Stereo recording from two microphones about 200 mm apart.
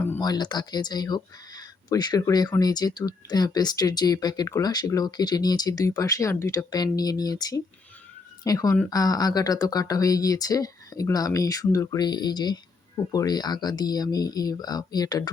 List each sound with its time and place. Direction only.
0.0 s speech: 15° left (ahead or behind)